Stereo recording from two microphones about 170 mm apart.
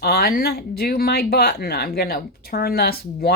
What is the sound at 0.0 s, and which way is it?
Speech, 65° left (ahead or behind).